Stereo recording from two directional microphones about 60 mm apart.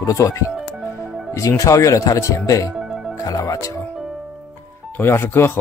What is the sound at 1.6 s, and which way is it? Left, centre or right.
Speech, left.